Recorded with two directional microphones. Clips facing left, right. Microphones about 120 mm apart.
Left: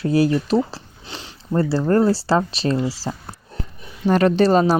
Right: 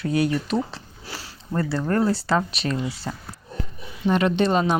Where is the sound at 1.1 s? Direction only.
20° left (ahead or behind); by 4.7 s 40° left (ahead or behind).